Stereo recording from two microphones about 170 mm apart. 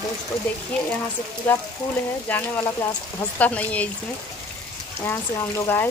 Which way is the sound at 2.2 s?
10° left (ahead or behind).